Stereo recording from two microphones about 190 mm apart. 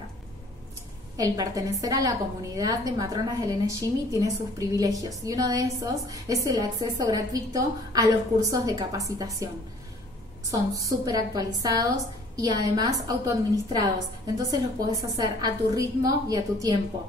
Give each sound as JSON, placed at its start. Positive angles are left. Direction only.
{"t": 1.1, "sound": "a woman's voice", "side_deg": -20}
{"t": 10.5, "sound": "a woman's voice", "side_deg": -20}